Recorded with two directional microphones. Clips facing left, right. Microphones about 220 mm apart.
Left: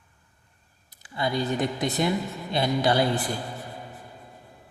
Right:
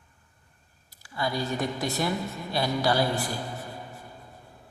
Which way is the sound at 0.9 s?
20° left (ahead or behind).